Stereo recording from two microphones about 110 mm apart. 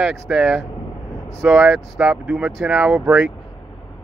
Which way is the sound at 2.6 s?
5° right (ahead or behind).